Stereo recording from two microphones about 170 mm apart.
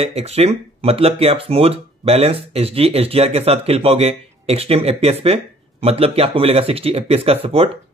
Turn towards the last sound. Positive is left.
turn(degrees=-35)  # may be behind; listen again after turning